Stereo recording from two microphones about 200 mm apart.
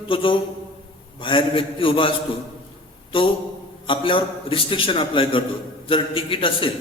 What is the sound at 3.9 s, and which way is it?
A man's voice, 25° left (ahead or behind).